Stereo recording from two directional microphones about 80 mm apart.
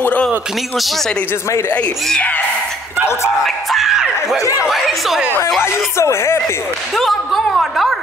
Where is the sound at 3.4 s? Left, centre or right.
Centre.